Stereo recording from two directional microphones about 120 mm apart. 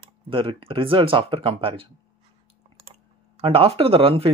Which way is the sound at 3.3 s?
50° right (ahead or behind).